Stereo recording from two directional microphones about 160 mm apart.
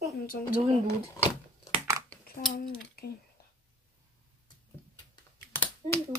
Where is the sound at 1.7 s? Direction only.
15° right (ahead or behind).